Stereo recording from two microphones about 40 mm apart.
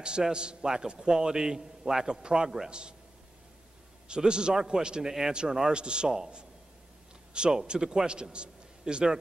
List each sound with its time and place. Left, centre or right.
0.0 s a man's voice: right
4.1 s a man's voice: right
7.3 s a man's voice: right